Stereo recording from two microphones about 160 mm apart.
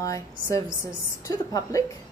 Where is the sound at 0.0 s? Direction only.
20° left (ahead or behind).